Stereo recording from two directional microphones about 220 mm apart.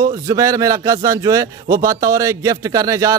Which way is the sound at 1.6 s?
40° right (ahead or behind).